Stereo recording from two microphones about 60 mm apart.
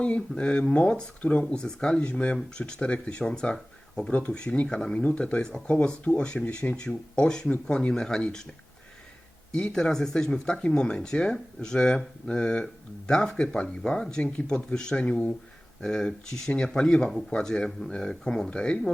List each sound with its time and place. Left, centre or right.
0.0 s speech: centre
4.8 s speech: centre
9.5 s speech: centre